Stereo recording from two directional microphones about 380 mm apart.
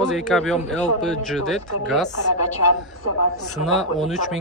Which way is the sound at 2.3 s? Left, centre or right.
Left.